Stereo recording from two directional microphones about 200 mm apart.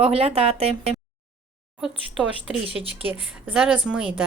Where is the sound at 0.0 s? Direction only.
30° right (ahead or behind).